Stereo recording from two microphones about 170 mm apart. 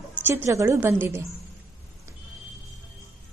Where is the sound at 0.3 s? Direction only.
15° right (ahead or behind).